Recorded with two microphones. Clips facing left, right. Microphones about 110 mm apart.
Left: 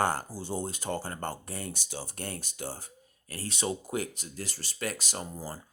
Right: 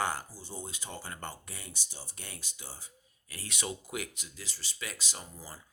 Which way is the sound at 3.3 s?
35° left (ahead or behind).